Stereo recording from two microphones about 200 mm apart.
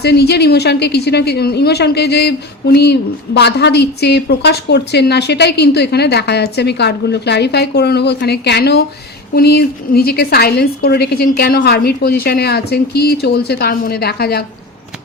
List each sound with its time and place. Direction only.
0.0 s a woman's voice: 55° left (ahead or behind)